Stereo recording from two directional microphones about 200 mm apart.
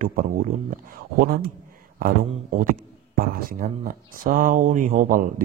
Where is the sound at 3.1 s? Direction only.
45° right (ahead or behind).